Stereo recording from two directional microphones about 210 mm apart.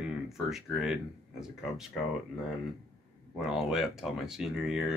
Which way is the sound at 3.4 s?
Centre (ahead or behind).